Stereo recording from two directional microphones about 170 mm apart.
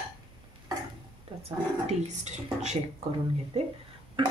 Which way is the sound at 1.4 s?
40° right (ahead or behind).